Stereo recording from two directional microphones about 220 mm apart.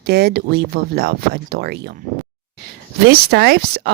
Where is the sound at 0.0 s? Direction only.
45° right (ahead or behind).